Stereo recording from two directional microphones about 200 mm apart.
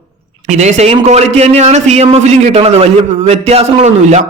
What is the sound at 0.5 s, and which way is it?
A man's voice, 35° right (ahead or behind).